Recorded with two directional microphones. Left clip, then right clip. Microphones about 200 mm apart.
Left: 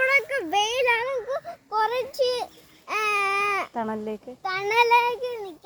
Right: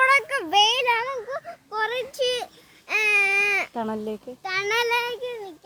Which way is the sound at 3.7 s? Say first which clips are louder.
Even; 5° right (ahead or behind).